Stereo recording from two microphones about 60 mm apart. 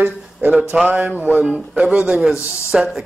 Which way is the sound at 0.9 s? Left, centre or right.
Right.